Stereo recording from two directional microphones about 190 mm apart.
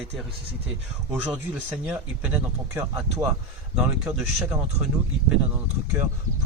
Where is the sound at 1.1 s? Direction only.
5° right (ahead or behind).